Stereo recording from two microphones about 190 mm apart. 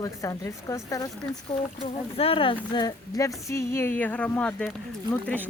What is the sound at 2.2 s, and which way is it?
Speech, 30° left (ahead or behind).